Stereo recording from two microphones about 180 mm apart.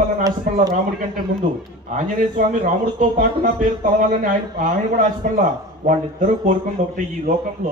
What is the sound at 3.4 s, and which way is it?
A man's voice, 45° right (ahead or behind).